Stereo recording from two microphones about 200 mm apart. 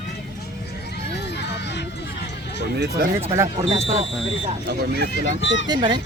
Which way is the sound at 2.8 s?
45° right (ahead or behind).